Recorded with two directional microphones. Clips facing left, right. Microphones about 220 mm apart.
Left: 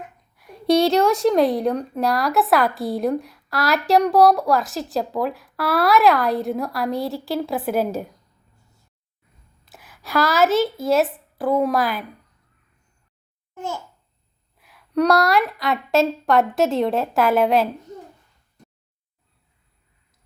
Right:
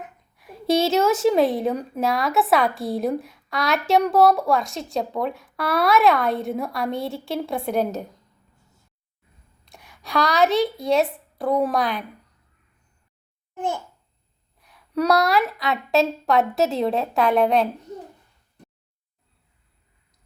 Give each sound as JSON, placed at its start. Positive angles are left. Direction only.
{"t": 0.3, "sound": "a woman's voice", "side_deg": 0}
{"t": 9.6, "sound": "a woman's voice", "side_deg": 5}
{"t": 14.6, "sound": "a woman's voice", "side_deg": 0}